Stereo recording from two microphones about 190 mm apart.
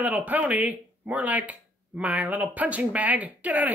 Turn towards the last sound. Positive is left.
turn(degrees=-10)  # may be behind; listen again after turning